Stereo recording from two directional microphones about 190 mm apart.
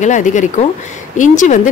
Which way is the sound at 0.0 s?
40° left (ahead or behind).